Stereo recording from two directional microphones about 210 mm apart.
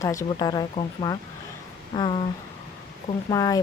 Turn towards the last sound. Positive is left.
turn(degrees=15)  # may be behind; listen again after turning